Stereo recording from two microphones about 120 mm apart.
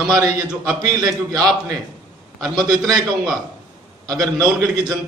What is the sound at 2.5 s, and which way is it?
Speech, 35° right (ahead or behind).